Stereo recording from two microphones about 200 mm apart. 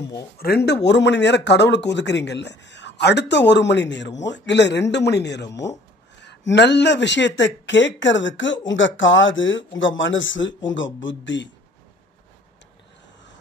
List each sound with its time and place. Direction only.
0.4 s speech: 50° left (ahead or behind)